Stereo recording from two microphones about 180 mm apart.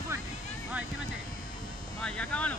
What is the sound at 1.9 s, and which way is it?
Vehicle, 5° left (ahead or behind).